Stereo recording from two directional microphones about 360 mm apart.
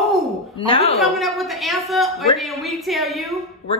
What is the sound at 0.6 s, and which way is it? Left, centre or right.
Speech, centre.